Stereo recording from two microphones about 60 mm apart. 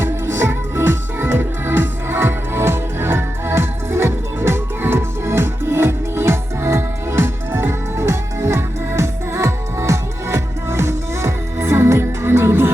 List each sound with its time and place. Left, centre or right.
0.0 s music: right